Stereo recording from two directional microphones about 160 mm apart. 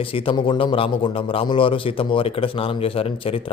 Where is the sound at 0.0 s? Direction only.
35° left (ahead or behind).